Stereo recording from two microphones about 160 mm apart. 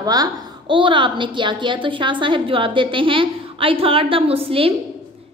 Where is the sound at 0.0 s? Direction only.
25° right (ahead or behind).